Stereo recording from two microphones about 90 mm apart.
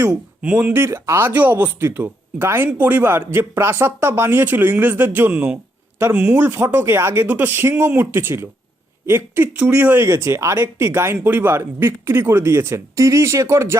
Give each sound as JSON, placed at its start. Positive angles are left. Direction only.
{"t": 0.1, "sound": "speech", "side_deg": -10}
{"t": 10.1, "sound": "speech", "side_deg": -30}